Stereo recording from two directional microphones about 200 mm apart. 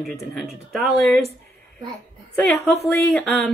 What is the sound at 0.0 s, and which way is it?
Speech, centre (ahead or behind).